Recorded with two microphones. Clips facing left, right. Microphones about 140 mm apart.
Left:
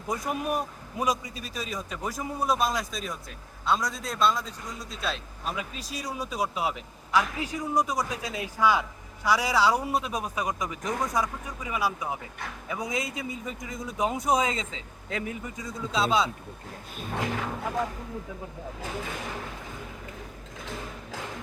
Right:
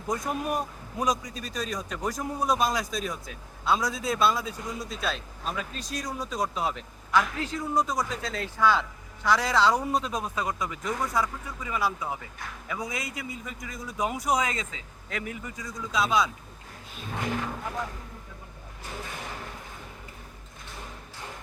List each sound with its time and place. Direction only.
0.1 s a man's voice: 10° left (ahead or behind); by 16.3 s 25° left (ahead or behind)